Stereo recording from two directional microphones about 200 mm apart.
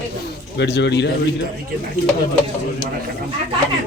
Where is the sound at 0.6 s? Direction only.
60° left (ahead or behind).